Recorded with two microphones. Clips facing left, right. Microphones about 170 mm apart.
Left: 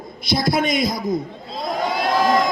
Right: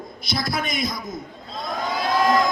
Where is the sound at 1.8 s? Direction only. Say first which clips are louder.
Left 2 dB; 25° left (ahead or behind).